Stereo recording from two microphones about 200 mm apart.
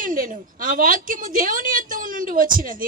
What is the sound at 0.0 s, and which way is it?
A woman's voice, 40° right (ahead or behind).